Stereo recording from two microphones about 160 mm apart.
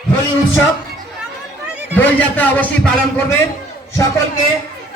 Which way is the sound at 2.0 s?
10° left (ahead or behind).